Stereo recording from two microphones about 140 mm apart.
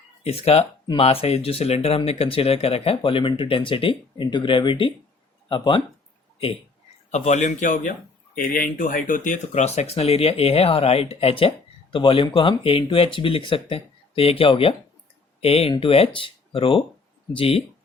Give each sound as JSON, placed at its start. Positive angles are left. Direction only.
{"t": 0.2, "sound": "speech", "side_deg": 45}
{"t": 7.1, "sound": "speech", "side_deg": 60}
{"t": 8.4, "sound": "speech", "side_deg": 85}
{"t": 9.5, "sound": "speech", "side_deg": 50}